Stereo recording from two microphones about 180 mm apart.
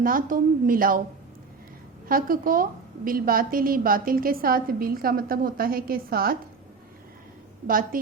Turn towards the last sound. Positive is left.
turn(degrees=-50)  # may be behind; listen again after turning